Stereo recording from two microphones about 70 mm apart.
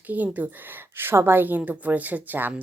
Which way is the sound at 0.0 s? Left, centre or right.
Right.